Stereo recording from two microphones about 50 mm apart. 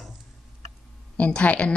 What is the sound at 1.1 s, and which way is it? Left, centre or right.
Speech, left.